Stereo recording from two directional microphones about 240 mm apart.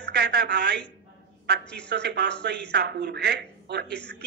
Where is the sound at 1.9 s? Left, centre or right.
Right.